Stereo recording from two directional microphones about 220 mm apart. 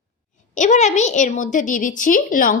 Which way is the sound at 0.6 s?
35° left (ahead or behind).